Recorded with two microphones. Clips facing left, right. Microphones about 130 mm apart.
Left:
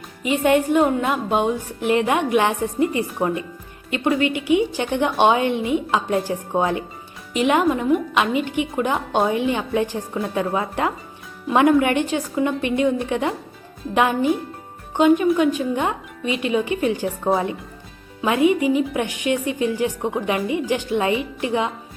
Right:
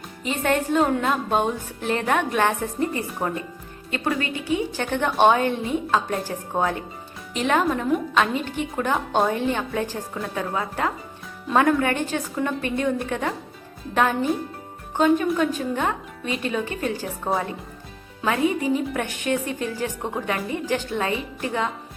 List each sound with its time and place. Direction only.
0.2 s a woman's voice: 10° left (ahead or behind)
18.2 s a woman's voice: 15° left (ahead or behind)